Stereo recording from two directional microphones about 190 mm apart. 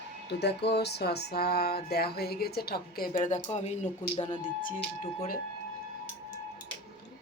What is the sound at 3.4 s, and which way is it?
Speech, 35° left (ahead or behind).